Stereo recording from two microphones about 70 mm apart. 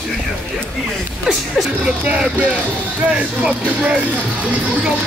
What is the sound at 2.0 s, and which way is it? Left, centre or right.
Speech, centre.